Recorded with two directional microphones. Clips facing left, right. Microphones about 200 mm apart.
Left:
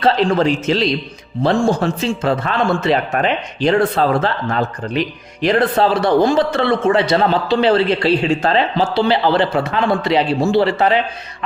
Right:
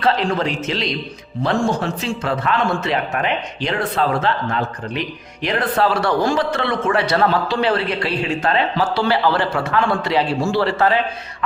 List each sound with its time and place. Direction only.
0.0 s speech: 30° left (ahead or behind)
2.0 s a man's voice: 30° left (ahead or behind)